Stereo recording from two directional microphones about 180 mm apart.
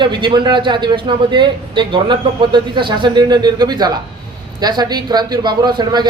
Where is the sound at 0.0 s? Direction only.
25° right (ahead or behind).